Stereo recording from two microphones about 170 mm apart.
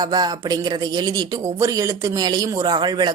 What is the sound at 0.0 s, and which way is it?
Speech, 25° right (ahead or behind).